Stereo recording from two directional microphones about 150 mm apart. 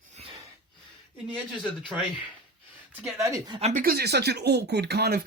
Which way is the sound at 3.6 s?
50° right (ahead or behind).